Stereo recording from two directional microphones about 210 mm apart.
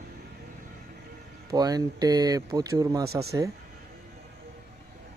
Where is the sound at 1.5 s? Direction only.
20° right (ahead or behind).